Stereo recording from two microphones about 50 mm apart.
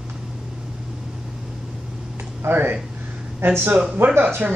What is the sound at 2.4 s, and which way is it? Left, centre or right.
Speech, right.